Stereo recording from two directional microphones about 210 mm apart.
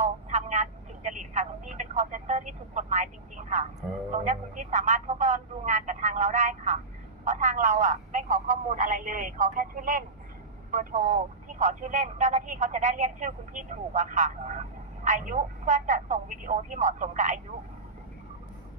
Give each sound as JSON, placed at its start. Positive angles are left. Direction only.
{"t": 0.0, "sound": "speech", "side_deg": -35}